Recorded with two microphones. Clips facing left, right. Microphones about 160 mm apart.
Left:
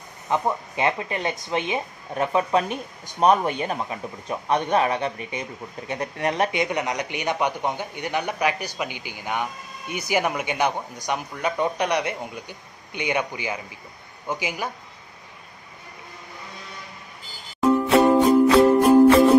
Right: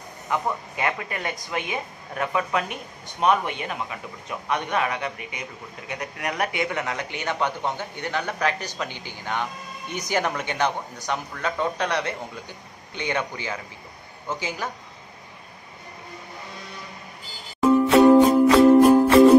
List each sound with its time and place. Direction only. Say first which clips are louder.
0.3 s speech: left 3 dB; 25° left (ahead or behind)
17.9 s music: right 2 dB; centre (ahead or behind)